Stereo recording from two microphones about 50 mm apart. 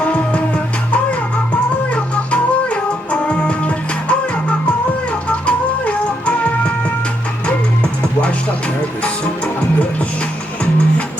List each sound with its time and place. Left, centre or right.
0.0 s music: left
9.0 s music: left